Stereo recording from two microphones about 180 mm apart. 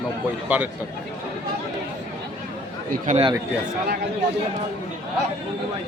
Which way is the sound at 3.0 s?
40° right (ahead or behind).